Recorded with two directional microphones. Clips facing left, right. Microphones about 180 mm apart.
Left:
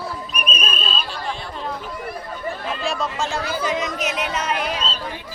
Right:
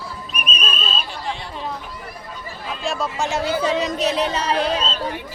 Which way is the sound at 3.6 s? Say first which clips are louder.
Right 3 dB; 30° right (ahead or behind).